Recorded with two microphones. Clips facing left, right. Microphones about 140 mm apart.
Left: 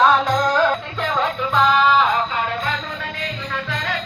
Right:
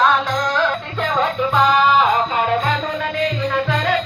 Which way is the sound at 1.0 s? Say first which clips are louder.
Right 3 dB; 5° right (ahead or behind).